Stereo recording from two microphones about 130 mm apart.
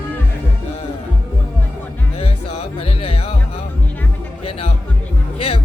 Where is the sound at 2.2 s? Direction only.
50° left (ahead or behind).